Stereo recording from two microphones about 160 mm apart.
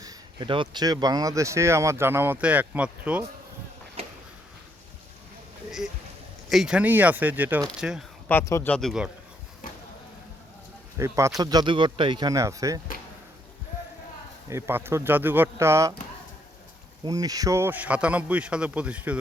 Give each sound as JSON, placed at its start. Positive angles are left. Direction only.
{"t": 0.0, "sound": "speech", "side_deg": -25}
{"t": 4.0, "sound": "a sound", "side_deg": -40}
{"t": 6.5, "sound": "speech", "side_deg": -5}
{"t": 8.3, "sound": "speech", "side_deg": 15}
{"t": 8.7, "sound": "speech", "side_deg": 0}
{"t": 10.9, "sound": "speech", "side_deg": -20}
{"t": 14.5, "sound": "speech", "side_deg": -15}
{"t": 17.0, "sound": "speech", "side_deg": -25}